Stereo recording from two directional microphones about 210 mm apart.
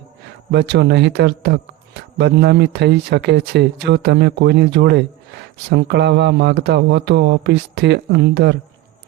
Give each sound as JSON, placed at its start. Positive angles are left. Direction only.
{"t": 0.5, "sound": "speech", "side_deg": -55}